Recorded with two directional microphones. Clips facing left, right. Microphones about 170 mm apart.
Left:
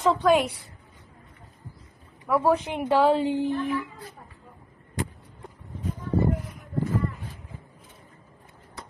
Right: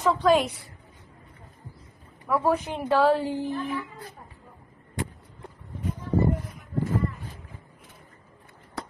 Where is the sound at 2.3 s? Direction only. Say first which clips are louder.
Left 2 dB; 10° left (ahead or behind).